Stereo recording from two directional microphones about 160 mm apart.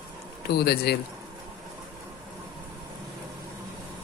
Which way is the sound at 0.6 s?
80° left.